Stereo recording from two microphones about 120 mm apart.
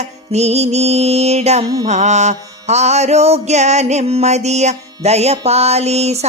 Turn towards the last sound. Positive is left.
turn(degrees=-65)  # may be behind; listen again after turning